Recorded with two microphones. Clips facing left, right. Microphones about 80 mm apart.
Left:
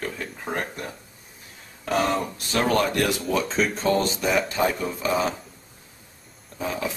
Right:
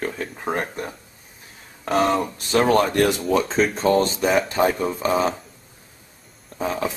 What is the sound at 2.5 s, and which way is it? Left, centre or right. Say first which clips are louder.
Speech: right 4 dB; right.